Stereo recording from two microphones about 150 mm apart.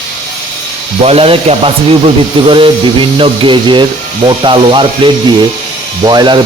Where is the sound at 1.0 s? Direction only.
40° right (ahead or behind).